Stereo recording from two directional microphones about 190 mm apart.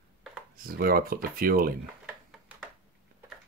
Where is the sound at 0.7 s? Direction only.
50° right (ahead or behind).